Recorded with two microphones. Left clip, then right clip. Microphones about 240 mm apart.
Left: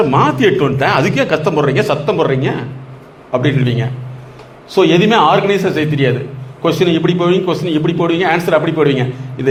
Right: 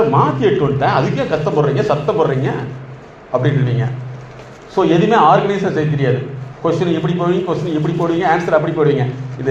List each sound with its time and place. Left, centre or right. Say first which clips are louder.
0.1 s a man's voice: left 2 dB; left